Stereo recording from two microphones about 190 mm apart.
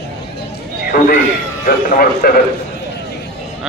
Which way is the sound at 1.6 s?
50° left (ahead or behind).